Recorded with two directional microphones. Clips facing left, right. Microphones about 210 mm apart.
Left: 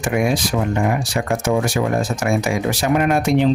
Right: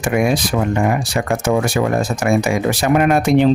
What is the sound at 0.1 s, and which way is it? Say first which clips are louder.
Speech: right 2 dB; 65° right (ahead or behind).